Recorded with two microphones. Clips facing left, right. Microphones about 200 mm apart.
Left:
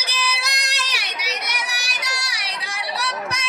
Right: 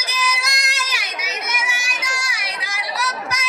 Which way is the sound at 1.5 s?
35° left (ahead or behind).